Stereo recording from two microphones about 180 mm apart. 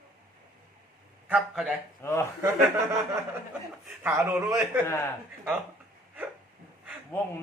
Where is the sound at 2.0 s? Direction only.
15° left (ahead or behind).